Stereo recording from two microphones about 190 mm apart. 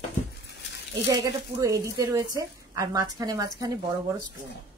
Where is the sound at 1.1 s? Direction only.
15° right (ahead or behind).